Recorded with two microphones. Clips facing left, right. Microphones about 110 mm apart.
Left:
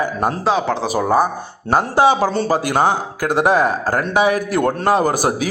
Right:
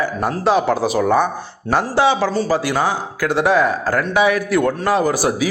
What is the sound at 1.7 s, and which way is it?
Speech, 40° left (ahead or behind).